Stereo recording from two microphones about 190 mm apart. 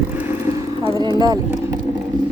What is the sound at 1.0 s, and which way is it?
Speech, 20° right (ahead or behind).